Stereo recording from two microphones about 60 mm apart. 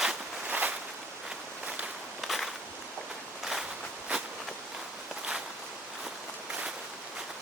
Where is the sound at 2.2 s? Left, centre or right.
Centre.